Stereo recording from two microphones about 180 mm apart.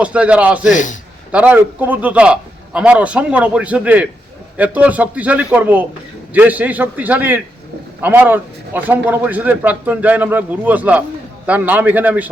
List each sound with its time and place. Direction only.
0.0 s a man's voice: 5° right (ahead or behind)
0.7 s a man's voice: 45° left (ahead or behind)
1.3 s a man's voice: 5° right (ahead or behind)